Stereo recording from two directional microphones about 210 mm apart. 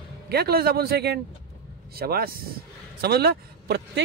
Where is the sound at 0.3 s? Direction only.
50° right (ahead or behind).